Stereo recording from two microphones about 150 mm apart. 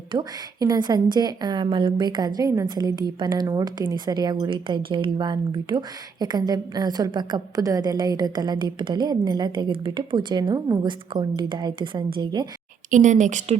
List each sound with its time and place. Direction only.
0.1 s a woman's voice: 30° right (ahead or behind)
12.9 s speech: 55° right (ahead or behind)